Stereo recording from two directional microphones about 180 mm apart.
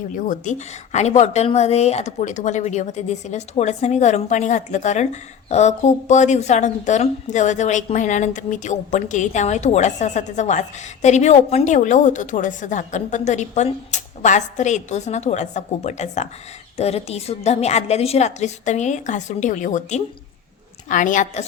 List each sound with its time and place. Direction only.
0.1 s a woman's voice: 45° left (ahead or behind)